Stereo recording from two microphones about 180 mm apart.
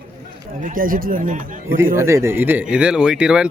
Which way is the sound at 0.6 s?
50° right (ahead or behind).